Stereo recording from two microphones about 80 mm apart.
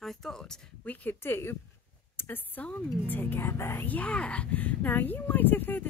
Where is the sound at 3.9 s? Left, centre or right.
Centre.